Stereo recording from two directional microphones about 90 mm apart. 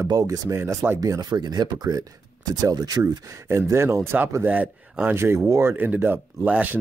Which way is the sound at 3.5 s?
30° right (ahead or behind).